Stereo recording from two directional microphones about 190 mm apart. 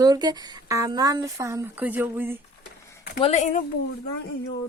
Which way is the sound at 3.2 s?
35° left (ahead or behind).